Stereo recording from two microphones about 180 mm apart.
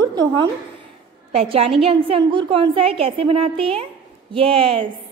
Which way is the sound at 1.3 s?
35° right (ahead or behind).